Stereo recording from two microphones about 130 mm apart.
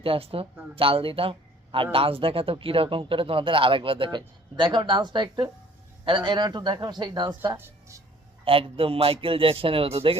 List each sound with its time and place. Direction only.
0.0 s a man's voice: 45° right (ahead or behind)
7.5 s speech: 20° right (ahead or behind)
8.4 s a man's voice: 45° right (ahead or behind)